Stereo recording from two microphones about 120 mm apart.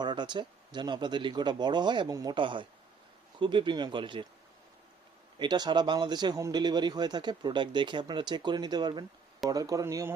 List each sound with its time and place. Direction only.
0.0 s speech: 40° right (ahead or behind)
5.4 s speech: 35° right (ahead or behind)